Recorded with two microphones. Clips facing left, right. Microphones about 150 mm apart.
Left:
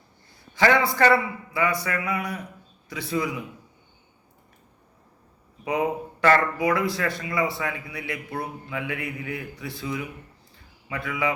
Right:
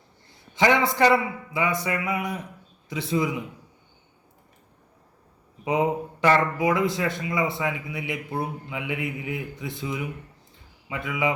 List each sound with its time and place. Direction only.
0.5 s speech: 20° right (ahead or behind)
5.6 s speech: 20° right (ahead or behind)